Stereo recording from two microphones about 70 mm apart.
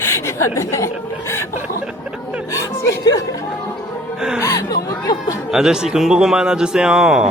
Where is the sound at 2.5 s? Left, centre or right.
Left.